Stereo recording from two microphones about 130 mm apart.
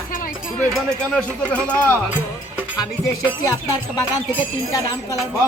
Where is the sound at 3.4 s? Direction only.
30° left (ahead or behind).